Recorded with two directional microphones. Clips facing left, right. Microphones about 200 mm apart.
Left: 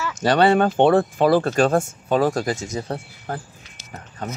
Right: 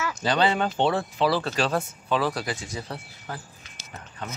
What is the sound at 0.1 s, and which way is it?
Speech, 60° left (ahead or behind).